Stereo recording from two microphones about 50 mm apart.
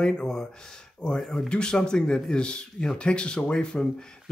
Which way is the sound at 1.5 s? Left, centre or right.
Centre.